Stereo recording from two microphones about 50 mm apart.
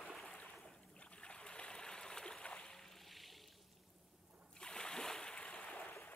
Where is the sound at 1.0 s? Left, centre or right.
Left.